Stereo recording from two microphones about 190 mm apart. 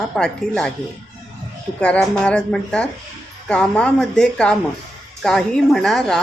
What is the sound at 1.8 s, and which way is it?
A woman's voice, 5° left (ahead or behind).